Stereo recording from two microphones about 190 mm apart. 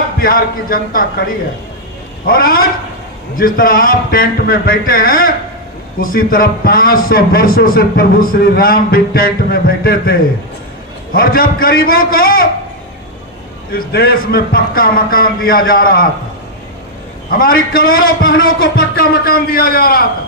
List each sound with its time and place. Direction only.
0.2 s a man's voice: 50° left (ahead or behind)
2.2 s a man's voice: 50° left (ahead or behind)
11.1 s a man's voice: 50° left (ahead or behind)
13.7 s a man's voice: 50° left (ahead or behind)
17.3 s a man's voice: 50° left (ahead or behind)